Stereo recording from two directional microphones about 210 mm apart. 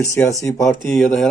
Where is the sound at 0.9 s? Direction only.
Centre (ahead or behind).